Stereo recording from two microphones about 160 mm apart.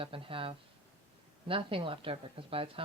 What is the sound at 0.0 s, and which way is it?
Speech, 35° right (ahead or behind).